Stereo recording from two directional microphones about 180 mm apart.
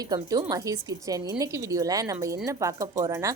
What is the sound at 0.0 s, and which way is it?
A woman's voice, 20° right (ahead or behind).